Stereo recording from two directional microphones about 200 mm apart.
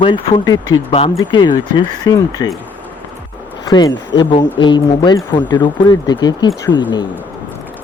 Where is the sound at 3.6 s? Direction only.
20° left (ahead or behind).